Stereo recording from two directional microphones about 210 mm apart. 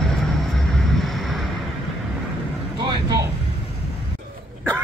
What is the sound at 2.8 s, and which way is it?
Vehicle, 15° right (ahead or behind).